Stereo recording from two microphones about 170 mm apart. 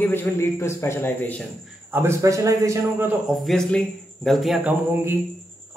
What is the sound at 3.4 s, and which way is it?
A man's voice, 5° left (ahead or behind).